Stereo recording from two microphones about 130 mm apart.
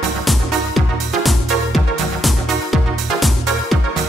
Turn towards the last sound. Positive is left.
turn(degrees=0)  # may be behind; listen again after turning